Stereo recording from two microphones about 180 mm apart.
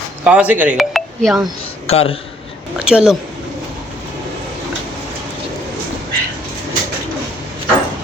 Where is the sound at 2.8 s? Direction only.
5° right (ahead or behind).